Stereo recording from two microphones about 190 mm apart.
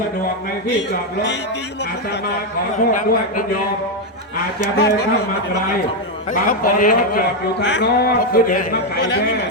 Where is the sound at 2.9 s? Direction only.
45° left (ahead or behind).